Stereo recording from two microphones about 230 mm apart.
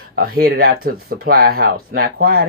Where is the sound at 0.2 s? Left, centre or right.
Right.